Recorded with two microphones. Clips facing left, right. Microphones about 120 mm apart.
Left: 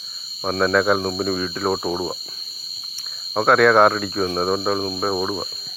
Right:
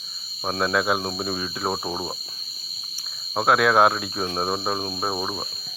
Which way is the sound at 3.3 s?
10° right (ahead or behind).